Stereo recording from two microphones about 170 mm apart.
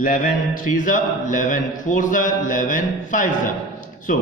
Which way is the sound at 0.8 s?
50° left (ahead or behind).